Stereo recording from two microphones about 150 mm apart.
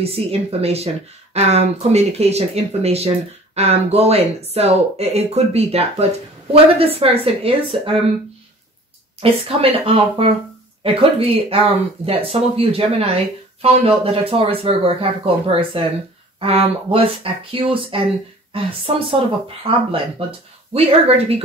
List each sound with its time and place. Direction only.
0.0 s speech: 40° right (ahead or behind)
9.2 s speech: 40° right (ahead or behind)